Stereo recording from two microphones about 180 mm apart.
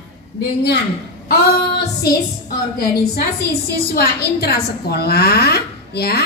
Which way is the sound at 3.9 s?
60° left (ahead or behind).